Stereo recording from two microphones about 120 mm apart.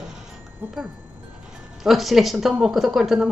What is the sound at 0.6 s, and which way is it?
Speech, 20° right (ahead or behind).